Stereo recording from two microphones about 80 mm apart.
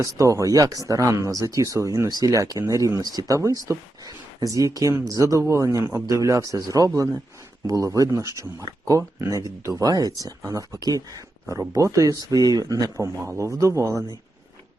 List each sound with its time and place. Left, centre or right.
0.0 s speech: right
13.2 s speech: right